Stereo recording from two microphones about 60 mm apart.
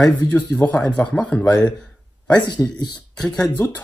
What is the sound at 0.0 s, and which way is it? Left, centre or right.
Speech, left.